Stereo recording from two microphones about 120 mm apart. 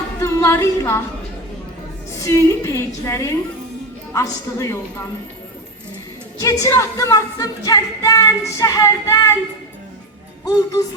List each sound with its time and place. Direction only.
0.2 s a woman's voice: 20° left (ahead or behind)
2.1 s music: 25° left (ahead or behind)
6.4 s music: 30° left (ahead or behind)
10.4 s music: 30° left (ahead or behind)